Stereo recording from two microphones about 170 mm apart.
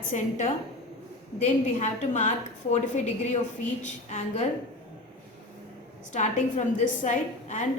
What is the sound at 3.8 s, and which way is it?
Speech, 45° left (ahead or behind).